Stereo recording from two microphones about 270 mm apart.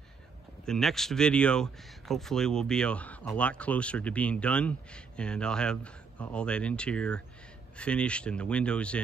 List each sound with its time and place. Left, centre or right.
0.7 s speech: centre